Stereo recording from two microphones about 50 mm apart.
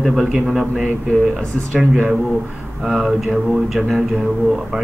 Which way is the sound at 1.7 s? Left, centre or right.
Centre.